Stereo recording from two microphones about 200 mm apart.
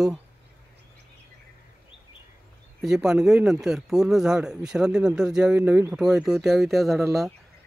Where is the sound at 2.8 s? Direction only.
5° right (ahead or behind).